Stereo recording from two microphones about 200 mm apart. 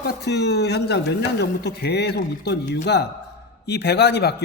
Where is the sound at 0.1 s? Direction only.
55° left (ahead or behind).